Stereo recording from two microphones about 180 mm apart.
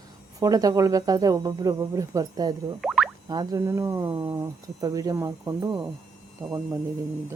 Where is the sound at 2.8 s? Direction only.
Centre (ahead or behind).